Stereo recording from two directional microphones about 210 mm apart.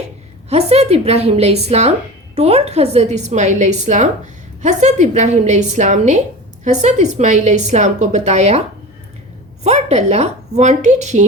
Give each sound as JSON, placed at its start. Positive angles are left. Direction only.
{"t": 0.5, "sound": "a woman's voice", "side_deg": -30}
{"t": 9.6, "sound": "a woman's voice", "side_deg": -30}